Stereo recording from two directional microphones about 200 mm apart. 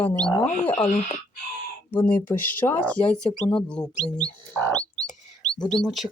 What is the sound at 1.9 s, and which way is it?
Speech, 10° left (ahead or behind).